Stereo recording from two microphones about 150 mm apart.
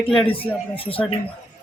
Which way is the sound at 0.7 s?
40° left (ahead or behind).